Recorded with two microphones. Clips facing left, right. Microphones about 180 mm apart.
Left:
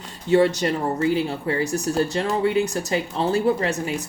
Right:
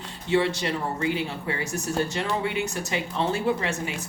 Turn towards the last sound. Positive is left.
turn(degrees=40)  # may be behind; listen again after turning